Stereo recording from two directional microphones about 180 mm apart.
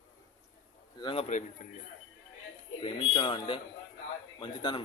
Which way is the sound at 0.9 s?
25° left (ahead or behind).